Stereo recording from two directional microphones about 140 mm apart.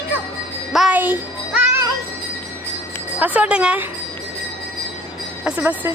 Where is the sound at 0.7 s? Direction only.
Centre (ahead or behind).